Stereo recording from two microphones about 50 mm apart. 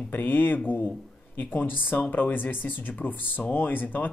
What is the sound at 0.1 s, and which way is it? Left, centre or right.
Speech, left.